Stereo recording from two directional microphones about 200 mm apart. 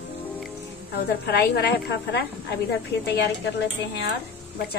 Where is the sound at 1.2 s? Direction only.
55° left (ahead or behind).